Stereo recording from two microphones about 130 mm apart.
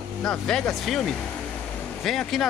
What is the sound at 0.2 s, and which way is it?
Speech, 5° left (ahead or behind).